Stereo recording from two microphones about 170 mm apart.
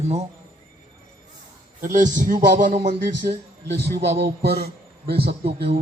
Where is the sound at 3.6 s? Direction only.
80° right.